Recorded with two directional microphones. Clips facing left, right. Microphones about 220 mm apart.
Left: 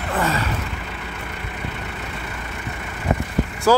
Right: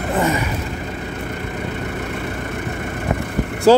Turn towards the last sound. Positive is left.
turn(degrees=-25)  # may be behind; listen again after turning